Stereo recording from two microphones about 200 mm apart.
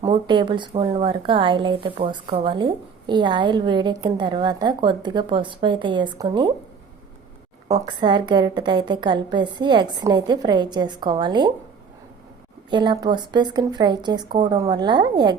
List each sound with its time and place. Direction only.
0.0 s a woman's voice: 25° right (ahead or behind)
7.7 s a woman's voice: 20° right (ahead or behind)
12.7 s a woman's voice: 20° right (ahead or behind)